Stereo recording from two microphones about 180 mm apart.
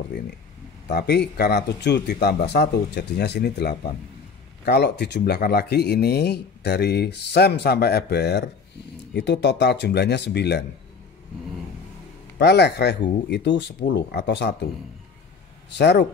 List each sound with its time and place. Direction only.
0.8 s speech: 65° left (ahead or behind)
12.4 s speech: 70° left (ahead or behind)
15.7 s speech: 70° left (ahead or behind)